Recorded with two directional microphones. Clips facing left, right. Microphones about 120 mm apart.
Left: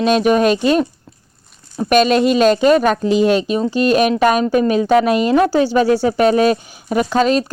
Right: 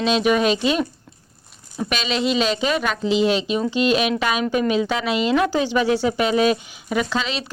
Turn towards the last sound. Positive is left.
turn(degrees=45)  # may be behind; listen again after turning